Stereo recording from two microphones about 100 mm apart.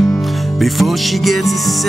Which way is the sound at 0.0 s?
Centre (ahead or behind).